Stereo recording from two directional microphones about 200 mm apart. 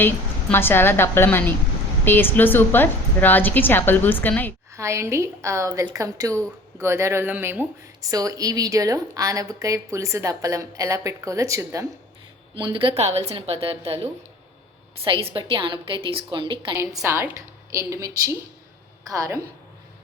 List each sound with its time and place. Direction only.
0.5 s a woman's voice: 10° left (ahead or behind)
4.7 s a woman's voice: 15° right (ahead or behind)